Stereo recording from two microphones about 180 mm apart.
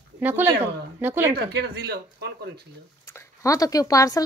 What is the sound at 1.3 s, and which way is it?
Speech, 65° right (ahead or behind).